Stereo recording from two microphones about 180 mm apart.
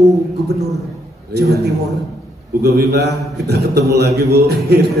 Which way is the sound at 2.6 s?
65° right (ahead or behind).